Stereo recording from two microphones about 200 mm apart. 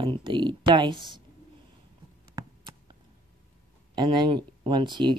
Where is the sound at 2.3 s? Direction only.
20° right (ahead or behind).